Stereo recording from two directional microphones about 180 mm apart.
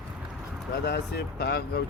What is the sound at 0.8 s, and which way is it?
Speech, 65° left (ahead or behind).